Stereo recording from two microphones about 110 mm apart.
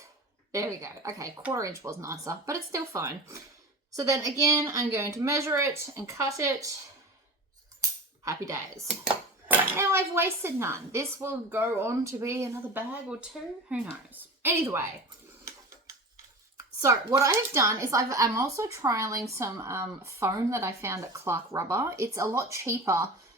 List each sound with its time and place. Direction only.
0.5 s speech: 30° right (ahead or behind)
7.8 s a sound: 30° right (ahead or behind)
8.9 s dishes: 10° right (ahead or behind)
9.7 s a woman's voice: 20° right (ahead or behind)
16.6 s speech: 25° right (ahead or behind)